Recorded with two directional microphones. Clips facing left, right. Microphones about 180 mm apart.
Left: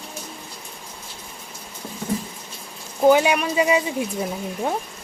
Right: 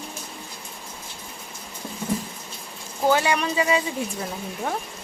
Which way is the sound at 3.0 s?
15° left (ahead or behind).